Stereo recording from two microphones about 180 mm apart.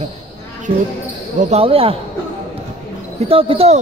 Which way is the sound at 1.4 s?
35° right (ahead or behind).